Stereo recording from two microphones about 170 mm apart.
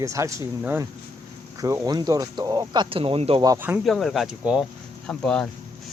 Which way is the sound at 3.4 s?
20° right (ahead or behind).